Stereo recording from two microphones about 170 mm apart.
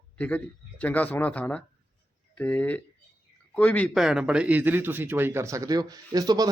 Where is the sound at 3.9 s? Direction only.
5° right (ahead or behind).